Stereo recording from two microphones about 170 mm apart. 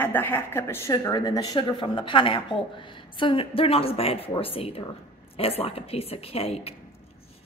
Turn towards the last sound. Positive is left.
turn(degrees=35)  # may be behind; listen again after turning